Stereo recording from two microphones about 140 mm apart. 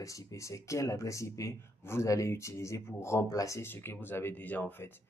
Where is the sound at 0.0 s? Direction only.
25° left (ahead or behind).